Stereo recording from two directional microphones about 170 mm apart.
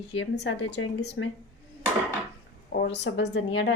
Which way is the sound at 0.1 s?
90° left.